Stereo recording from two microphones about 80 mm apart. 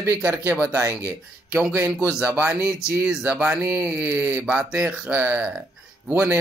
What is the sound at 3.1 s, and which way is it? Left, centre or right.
Mantra, centre.